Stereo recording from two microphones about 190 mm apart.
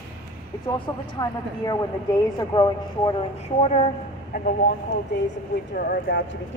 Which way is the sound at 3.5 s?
35° left (ahead or behind).